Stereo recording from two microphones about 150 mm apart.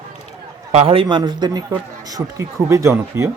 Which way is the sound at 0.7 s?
40° right (ahead or behind).